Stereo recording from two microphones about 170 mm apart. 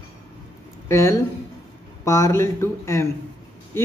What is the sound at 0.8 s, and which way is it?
Speech, 15° left (ahead or behind).